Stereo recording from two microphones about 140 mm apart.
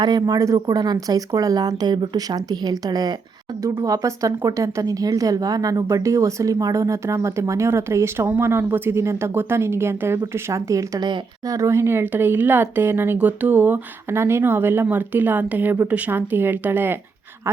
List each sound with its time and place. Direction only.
0.0 s a woman's voice: 30° right (ahead or behind); by 17.0 s 15° right (ahead or behind)